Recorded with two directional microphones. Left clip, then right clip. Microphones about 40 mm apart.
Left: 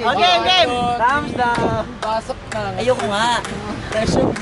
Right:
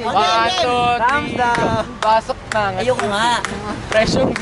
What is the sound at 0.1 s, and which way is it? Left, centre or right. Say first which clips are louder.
Speech: even; left.